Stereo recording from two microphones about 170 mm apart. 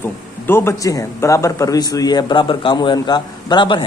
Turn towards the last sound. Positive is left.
turn(degrees=30)  # may be behind; listen again after turning